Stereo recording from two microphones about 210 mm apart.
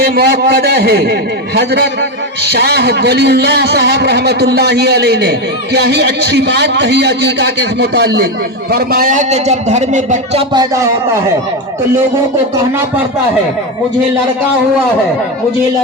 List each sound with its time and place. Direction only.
0.0 s a man's voice: 50° right (ahead or behind); by 10.4 s 35° right (ahead or behind)
10.5 s a man's voice: 15° right (ahead or behind)